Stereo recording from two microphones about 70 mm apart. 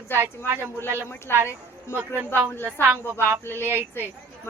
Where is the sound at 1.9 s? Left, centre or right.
Right.